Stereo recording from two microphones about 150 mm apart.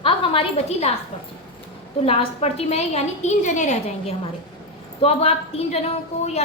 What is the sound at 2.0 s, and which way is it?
A woman's voice, 40° left (ahead or behind).